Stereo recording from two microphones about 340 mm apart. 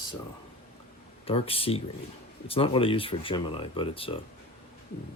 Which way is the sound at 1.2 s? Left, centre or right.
Centre.